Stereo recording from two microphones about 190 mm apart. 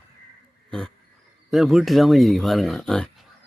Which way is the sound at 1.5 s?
Centre (ahead or behind).